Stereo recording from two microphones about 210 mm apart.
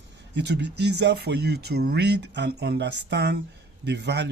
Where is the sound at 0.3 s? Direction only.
55° right (ahead or behind).